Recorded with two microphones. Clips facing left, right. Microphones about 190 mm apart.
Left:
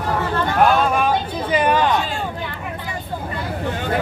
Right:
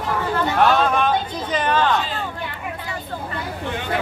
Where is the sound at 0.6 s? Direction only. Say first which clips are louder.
Left 1 dB; 5° left (ahead or behind).